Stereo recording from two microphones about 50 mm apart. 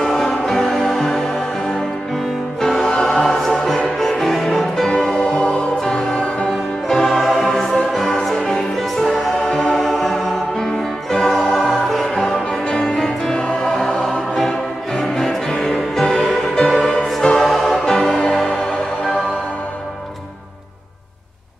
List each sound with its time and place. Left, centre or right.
0.0 s music: centre
2.6 s music: centre